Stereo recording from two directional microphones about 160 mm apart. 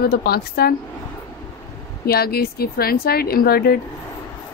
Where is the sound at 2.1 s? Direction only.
75° left (ahead or behind).